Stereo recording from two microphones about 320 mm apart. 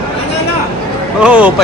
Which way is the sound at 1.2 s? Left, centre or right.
Centre.